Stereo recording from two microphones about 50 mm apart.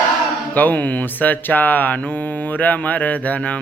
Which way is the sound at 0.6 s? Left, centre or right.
Left.